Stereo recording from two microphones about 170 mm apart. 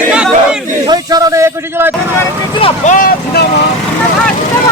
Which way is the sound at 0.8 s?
25° right (ahead or behind).